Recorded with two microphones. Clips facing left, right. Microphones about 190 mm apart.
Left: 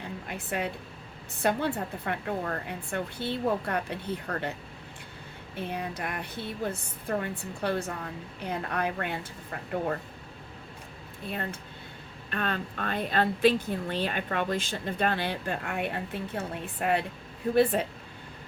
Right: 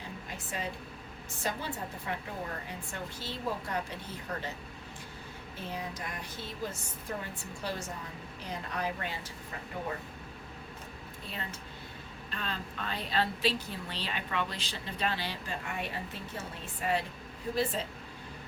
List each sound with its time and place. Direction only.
0.3 s a woman's voice: 60° left (ahead or behind)
5.5 s a woman's voice: 60° left (ahead or behind)
12.3 s a woman's voice: 60° left (ahead or behind)